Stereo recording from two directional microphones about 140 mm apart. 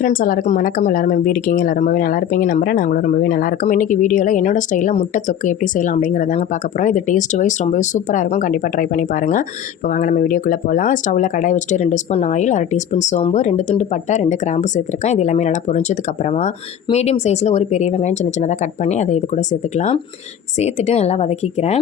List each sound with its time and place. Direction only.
0.0 s speech: 80° left; by 21.8 s 50° left (ahead or behind)